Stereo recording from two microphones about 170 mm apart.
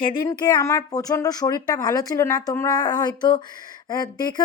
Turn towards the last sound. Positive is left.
turn(degrees=25)  # may be behind; listen again after turning